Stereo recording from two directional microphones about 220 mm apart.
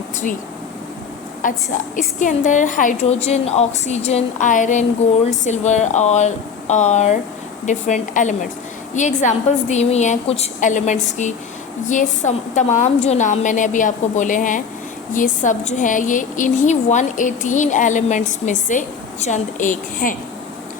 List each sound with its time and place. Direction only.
1.4 s a woman's voice: 35° left (ahead or behind)